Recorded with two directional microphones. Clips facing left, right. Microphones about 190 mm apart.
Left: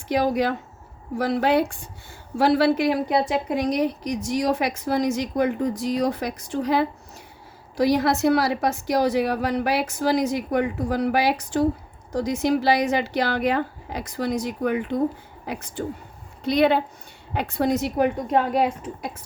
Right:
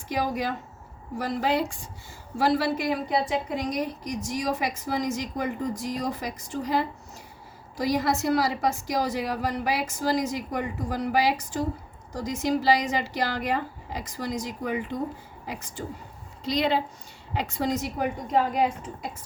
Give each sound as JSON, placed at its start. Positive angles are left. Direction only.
{"t": 0.1, "sound": "a woman's voice", "side_deg": 70}